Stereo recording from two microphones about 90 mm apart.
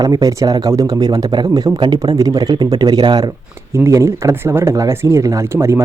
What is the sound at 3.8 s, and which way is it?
Speech, 30° right (ahead or behind).